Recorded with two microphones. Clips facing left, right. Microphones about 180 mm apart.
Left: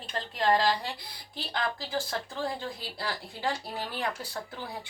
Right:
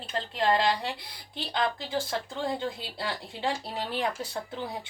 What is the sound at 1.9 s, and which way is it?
Speech, 25° right (ahead or behind).